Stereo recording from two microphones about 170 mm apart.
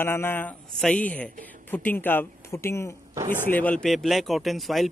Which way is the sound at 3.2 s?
45° right (ahead or behind).